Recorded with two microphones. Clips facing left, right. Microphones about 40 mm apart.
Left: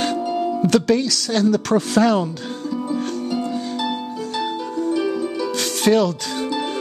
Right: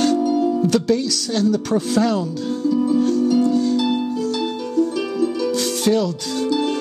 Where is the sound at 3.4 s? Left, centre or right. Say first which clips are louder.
Right 8 dB; centre.